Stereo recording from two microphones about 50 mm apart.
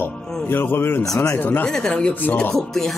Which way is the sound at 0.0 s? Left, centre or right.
Left.